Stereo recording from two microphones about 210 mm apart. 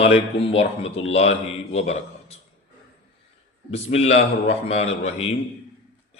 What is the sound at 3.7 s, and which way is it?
A man's voice, 30° left (ahead or behind).